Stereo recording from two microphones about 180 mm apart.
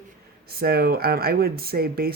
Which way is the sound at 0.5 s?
60° right (ahead or behind).